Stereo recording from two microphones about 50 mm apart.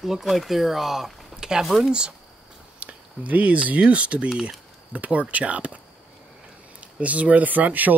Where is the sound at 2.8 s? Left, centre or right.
Right.